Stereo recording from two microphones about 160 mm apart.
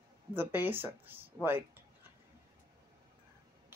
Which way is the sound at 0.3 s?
15° right (ahead or behind).